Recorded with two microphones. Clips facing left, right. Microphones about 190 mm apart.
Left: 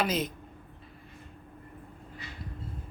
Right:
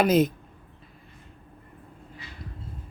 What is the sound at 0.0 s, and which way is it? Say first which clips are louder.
Speech: right 9 dB; 50° right (ahead or behind).